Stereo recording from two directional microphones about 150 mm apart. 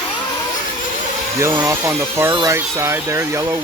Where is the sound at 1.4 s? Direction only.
15° right (ahead or behind).